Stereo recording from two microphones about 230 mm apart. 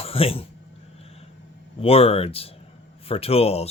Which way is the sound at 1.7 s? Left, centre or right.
Left.